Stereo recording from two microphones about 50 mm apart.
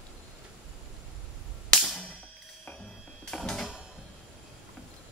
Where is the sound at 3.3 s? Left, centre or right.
Centre.